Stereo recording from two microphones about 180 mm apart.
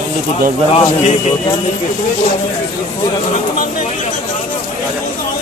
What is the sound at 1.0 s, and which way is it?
Speech, 40° left (ahead or behind).